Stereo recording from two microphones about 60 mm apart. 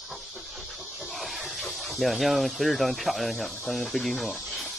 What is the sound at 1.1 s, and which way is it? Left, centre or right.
Speech, centre.